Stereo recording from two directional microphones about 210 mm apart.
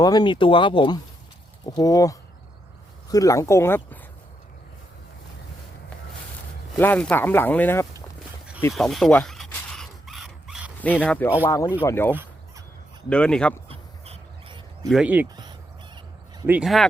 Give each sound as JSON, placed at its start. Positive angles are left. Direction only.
{"t": 0.0, "sound": "speech", "side_deg": 20}
{"t": 6.7, "sound": "speech", "side_deg": 10}
{"t": 8.7, "sound": "a sound", "side_deg": 0}
{"t": 11.0, "sound": "speech", "side_deg": 5}
{"t": 12.1, "sound": "a sound", "side_deg": -10}
{"t": 13.1, "sound": "speech", "side_deg": 5}
{"t": 13.7, "sound": "a sound", "side_deg": -30}
{"t": 14.8, "sound": "speech", "side_deg": -5}
{"t": 16.5, "sound": "speech", "side_deg": -5}